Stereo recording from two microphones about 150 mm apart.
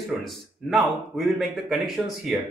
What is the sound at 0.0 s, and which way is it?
Speech, centre (ahead or behind).